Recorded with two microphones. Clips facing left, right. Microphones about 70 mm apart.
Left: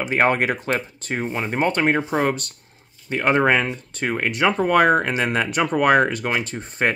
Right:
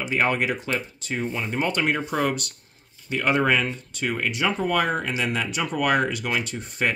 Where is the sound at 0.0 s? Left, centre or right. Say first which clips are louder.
Left 4 dB; left.